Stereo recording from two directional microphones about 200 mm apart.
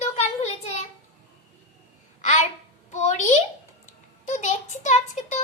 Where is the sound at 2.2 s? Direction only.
35° left (ahead or behind).